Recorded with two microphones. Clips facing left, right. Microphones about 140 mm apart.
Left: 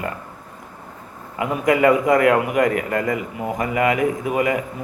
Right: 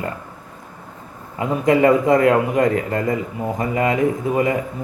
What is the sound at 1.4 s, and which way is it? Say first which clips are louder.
A man's voice: right 2 dB; 30° right (ahead or behind).